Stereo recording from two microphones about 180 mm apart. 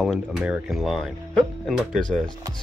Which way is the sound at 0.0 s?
5° right (ahead or behind).